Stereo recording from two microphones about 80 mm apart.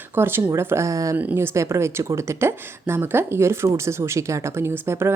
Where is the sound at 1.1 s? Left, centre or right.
Right.